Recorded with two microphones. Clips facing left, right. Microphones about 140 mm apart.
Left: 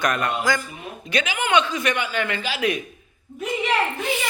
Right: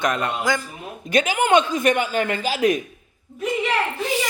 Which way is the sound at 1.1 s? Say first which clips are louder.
Right 4 dB; 45° right (ahead or behind).